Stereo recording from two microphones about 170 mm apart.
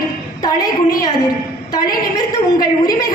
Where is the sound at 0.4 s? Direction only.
20° left (ahead or behind).